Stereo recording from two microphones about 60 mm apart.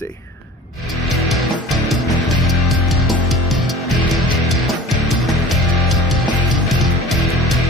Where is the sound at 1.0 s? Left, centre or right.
Centre.